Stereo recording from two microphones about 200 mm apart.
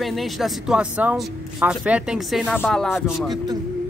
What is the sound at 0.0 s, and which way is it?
A man's voice, centre (ahead or behind).